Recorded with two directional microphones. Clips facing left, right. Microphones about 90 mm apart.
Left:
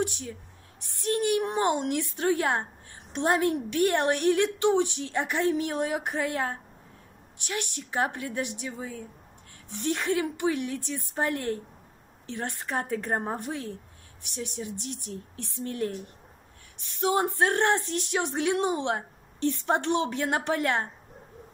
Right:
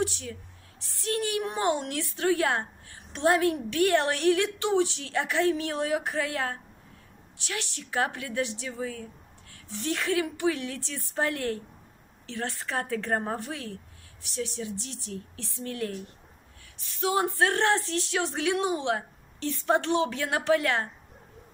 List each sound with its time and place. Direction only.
0.0 s a woman's voice: 20° left (ahead or behind)
17.0 s speech: 25° left (ahead or behind)